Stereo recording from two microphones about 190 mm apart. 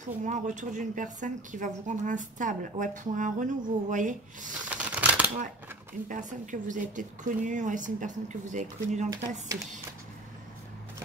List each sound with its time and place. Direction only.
0.0 s a woman's voice: 40° right (ahead or behind)
4.7 s typewriter: 5° right (ahead or behind)
6.0 s a woman's voice: 40° right (ahead or behind)